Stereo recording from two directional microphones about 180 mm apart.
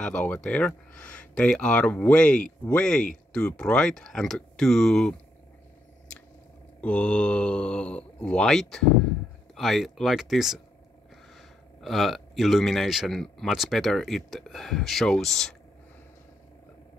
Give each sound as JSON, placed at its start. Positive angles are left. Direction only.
{"t": 0.0, "sound": "speech", "side_deg": 5}
{"t": 6.8, "sound": "speech", "side_deg": 5}